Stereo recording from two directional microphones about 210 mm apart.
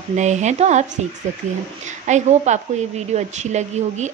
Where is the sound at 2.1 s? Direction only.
35° right (ahead or behind).